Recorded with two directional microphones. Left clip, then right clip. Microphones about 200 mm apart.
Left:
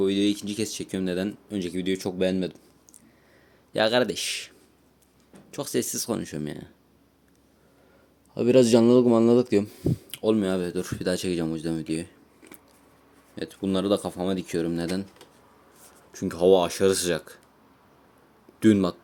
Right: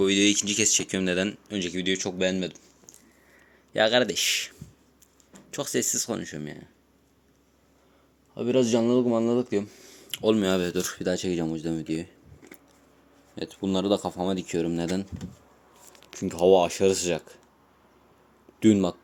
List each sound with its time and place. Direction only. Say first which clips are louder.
0.0 s speech: right 2 dB; centre (ahead or behind); by 2.6 s 15° left (ahead or behind)
3.7 s speech: right 1 dB; 10° left (ahead or behind); by 6.7 s 25° left (ahead or behind)
8.4 s a man's voice: left 5 dB; 35° left (ahead or behind)
10.1 s speech: right 2 dB; centre (ahead or behind)
18.6 s speech: left 1 dB; centre (ahead or behind)